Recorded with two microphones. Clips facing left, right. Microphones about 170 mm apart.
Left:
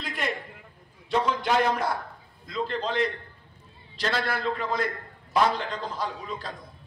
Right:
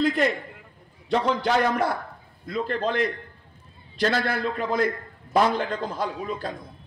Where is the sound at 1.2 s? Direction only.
50° right (ahead or behind).